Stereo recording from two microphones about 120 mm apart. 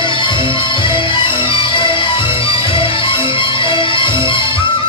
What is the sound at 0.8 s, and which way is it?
Music, 45° left (ahead or behind).